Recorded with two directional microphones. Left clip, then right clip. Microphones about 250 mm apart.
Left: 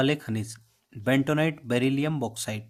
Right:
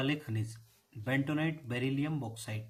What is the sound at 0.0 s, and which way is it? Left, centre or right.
Speech, left.